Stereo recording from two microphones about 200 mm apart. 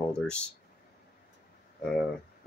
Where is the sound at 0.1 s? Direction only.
5° left (ahead or behind).